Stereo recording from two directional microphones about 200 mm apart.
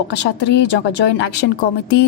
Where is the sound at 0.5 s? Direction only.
60° left (ahead or behind).